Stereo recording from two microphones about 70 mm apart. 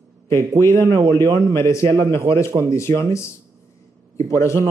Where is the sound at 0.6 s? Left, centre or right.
Left.